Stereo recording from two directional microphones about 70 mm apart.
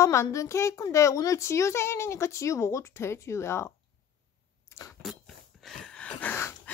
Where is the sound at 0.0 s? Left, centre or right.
Left.